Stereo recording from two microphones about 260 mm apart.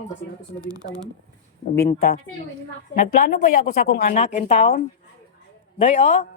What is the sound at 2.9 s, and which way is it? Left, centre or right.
A woman's voice, left.